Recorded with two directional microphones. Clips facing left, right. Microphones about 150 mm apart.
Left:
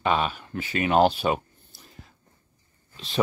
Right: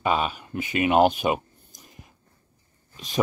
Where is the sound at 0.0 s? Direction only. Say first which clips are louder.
Even; 5° right (ahead or behind).